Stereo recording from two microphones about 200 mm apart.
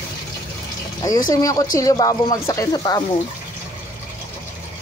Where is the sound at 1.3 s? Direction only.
15° left (ahead or behind).